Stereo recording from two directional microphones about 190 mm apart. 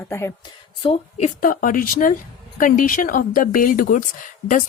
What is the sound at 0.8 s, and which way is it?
A woman's voice, 35° left (ahead or behind).